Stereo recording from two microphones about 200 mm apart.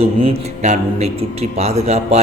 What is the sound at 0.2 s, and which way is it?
A man's voice, 30° right (ahead or behind).